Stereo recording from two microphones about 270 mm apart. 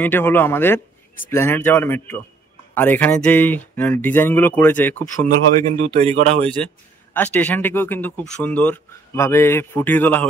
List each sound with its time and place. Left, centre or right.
0.0 s speech: centre
5.9 s speech: right
6.4 s a man's voice: centre